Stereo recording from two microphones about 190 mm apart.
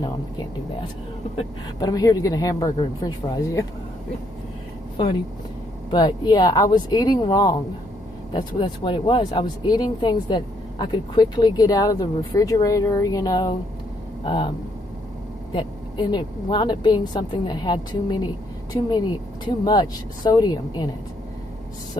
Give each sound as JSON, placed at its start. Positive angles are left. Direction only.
{"t": 1.8, "sound": "speech", "side_deg": 20}
{"t": 5.9, "sound": "speech", "side_deg": 20}
{"t": 15.5, "sound": "speech", "side_deg": 25}